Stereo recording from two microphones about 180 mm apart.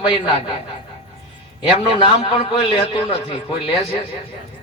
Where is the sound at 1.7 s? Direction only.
30° left (ahead or behind).